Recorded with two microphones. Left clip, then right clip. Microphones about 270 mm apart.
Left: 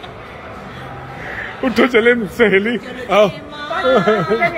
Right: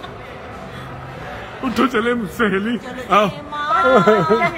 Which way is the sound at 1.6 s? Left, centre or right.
Centre.